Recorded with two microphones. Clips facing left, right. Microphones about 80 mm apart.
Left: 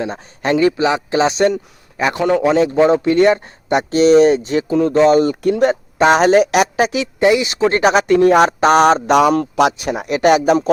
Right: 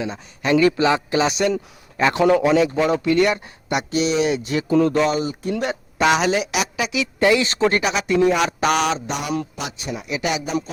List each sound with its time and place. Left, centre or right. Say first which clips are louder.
0.0 s speech: left 4 dB; left
1.5 s speech: left 1 dB; centre
2.4 s speech: left 4 dB; left
4.7 s speech: left 5 dB; left
5.1 s speech: left 10 dB; left
5.5 s speech: left 8 dB; left
7.2 s speech: left 3 dB; centre
7.7 s speech: left 7 dB; left
8.4 s speech: left 8 dB; left
9.6 s speech: left 14 dB; left